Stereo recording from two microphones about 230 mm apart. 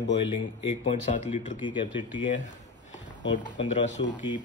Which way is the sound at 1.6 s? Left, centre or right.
Left.